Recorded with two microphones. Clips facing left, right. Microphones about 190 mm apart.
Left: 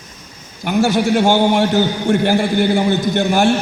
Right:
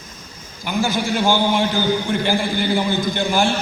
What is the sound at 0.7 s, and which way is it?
A man's voice, 65° left (ahead or behind).